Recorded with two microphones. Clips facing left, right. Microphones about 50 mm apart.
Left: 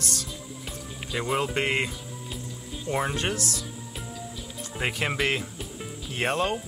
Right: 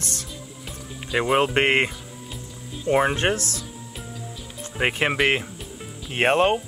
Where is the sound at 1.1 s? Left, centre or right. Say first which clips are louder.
Right 7 dB; right.